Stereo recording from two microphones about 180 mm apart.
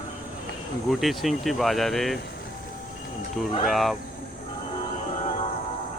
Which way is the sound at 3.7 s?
Centre (ahead or behind).